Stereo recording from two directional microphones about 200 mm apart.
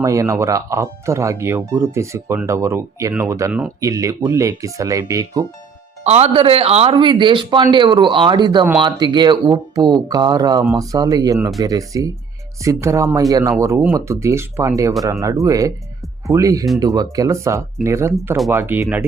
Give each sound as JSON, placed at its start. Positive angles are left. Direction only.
{"t": 0.0, "sound": "speech", "side_deg": -15}
{"t": 6.1, "sound": "speech", "side_deg": -30}